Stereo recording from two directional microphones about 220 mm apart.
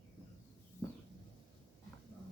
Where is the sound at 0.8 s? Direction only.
10° left (ahead or behind).